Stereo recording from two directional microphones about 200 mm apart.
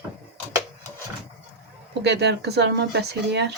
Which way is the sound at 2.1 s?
55° right (ahead or behind).